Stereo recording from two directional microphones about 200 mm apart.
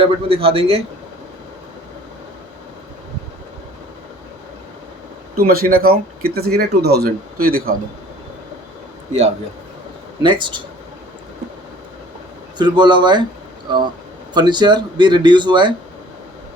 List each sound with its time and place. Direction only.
0.0 s speech: 30° right (ahead or behind)
5.4 s speech: 50° right (ahead or behind)
10.2 s speech: 25° right (ahead or behind)
12.5 s speech: 20° right (ahead or behind)
14.3 s speech: 20° right (ahead or behind)